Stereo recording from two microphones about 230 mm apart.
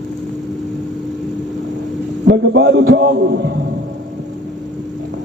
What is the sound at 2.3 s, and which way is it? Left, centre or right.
A man's voice, right.